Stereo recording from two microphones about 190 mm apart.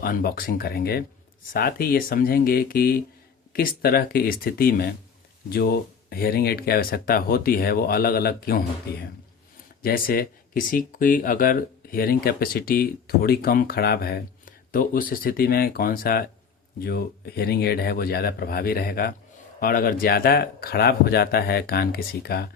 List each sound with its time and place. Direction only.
0.0 s speech: 50° left (ahead or behind)